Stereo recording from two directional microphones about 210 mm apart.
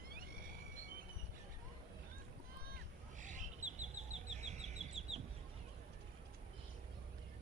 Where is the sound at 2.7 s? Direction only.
35° right (ahead or behind).